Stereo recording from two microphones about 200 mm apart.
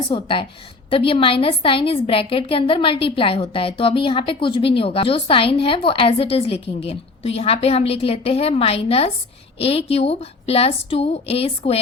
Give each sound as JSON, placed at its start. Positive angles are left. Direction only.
{"t": 0.1, "sound": "a woman's voice", "side_deg": 25}